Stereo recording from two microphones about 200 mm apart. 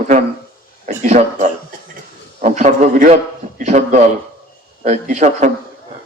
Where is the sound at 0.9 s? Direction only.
35° right (ahead or behind).